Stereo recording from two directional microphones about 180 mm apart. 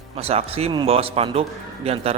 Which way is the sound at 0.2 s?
35° right (ahead or behind).